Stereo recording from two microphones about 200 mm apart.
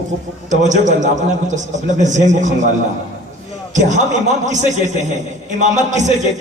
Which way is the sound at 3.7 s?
40° right (ahead or behind).